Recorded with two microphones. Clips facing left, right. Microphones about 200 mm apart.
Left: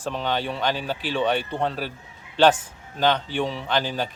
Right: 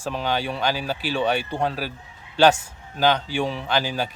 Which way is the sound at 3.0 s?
10° right (ahead or behind).